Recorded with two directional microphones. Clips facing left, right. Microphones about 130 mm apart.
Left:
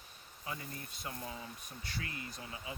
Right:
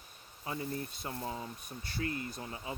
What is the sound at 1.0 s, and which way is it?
Speech, 30° right (ahead or behind).